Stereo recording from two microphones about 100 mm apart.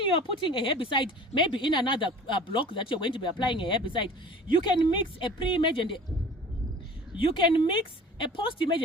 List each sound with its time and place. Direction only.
0.0 s a woman's voice: 55° left (ahead or behind)
7.2 s a woman's voice: 55° left (ahead or behind)